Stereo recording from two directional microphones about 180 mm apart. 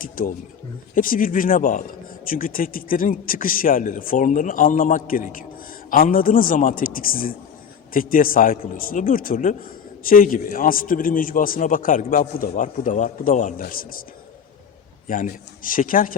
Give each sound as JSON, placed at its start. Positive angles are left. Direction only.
{"t": 0.0, "sound": "a man's voice", "side_deg": 50}
{"t": 15.0, "sound": "a man's voice", "side_deg": 50}